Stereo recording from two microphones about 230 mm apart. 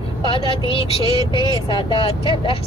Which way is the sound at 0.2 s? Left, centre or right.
Left.